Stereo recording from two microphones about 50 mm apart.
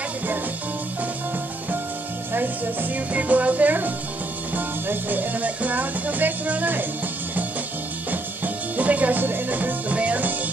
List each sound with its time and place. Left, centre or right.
2.3 s music: right
8.7 s music: right